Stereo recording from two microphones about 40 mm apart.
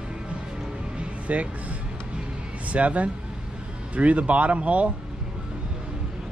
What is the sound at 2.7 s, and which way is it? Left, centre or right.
Speech, right.